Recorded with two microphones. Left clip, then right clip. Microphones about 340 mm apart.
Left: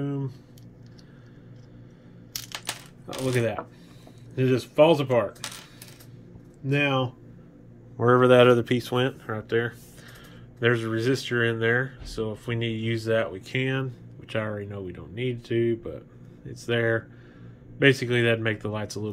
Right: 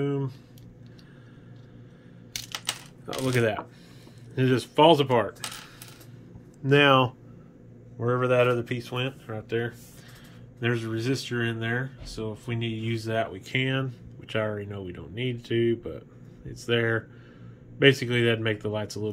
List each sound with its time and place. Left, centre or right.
0.0 s a sound: centre
3.1 s speech: centre
6.7 s speech: centre
8.0 s speech: centre